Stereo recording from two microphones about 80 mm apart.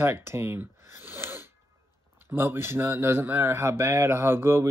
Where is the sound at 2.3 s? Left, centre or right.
Right.